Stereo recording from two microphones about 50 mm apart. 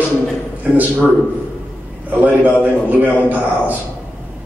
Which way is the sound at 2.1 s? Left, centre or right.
Right.